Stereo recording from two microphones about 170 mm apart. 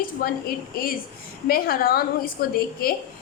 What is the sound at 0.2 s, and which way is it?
A woman's voice, 60° left (ahead or behind).